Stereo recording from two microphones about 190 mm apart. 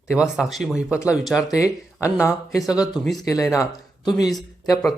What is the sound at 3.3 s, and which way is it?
Speech, 15° left (ahead or behind).